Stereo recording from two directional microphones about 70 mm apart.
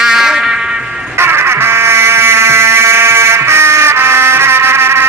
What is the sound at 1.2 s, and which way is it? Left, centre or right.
Music, right.